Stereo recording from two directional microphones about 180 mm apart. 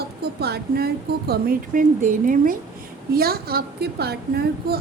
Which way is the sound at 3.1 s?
60° right (ahead or behind).